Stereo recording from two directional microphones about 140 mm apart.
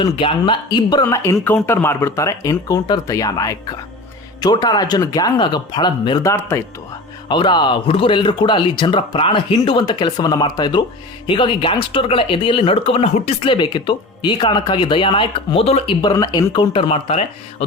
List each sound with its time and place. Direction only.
0.0 s speech: 40° left (ahead or behind)
1.0 s speech: 20° left (ahead or behind)
7.3 s speech: 35° left (ahead or behind); by 13.3 s 50° left (ahead or behind)
13.4 s speech: 35° left (ahead or behind)
16.0 s speech: 30° left (ahead or behind); by 17.2 s 45° left (ahead or behind)